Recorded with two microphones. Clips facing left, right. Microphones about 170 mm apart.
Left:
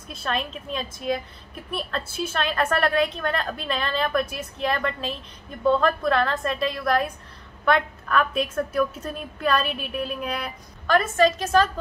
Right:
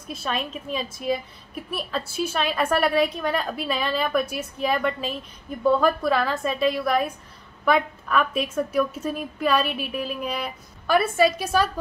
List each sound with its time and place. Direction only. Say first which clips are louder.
0.1 s a woman's voice: even; 5° right (ahead or behind)